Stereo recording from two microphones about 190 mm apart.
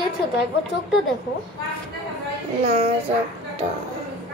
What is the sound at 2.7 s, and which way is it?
Speech, 30° right (ahead or behind).